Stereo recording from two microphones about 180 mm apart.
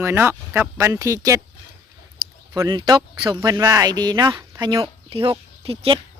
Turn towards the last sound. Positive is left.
turn(degrees=-30)  # may be behind; listen again after turning